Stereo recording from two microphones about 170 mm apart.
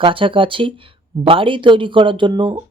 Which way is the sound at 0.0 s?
30° right (ahead or behind).